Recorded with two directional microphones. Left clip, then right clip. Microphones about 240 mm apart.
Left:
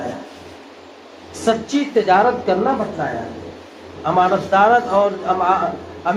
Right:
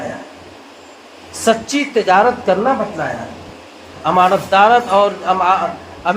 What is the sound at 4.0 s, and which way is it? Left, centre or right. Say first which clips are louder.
A man's voice: right 3 dB; right.